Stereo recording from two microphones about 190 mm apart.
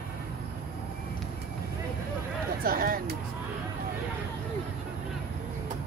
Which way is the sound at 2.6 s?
50° right (ahead or behind).